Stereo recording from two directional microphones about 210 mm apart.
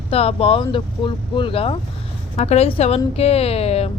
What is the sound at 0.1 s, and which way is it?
Speech, 30° left (ahead or behind).